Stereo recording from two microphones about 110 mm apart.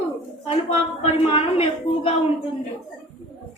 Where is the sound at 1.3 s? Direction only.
60° left (ahead or behind).